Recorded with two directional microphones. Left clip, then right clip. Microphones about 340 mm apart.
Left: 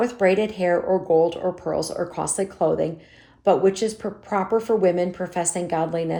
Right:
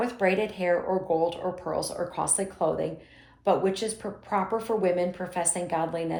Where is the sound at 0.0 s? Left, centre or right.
Centre.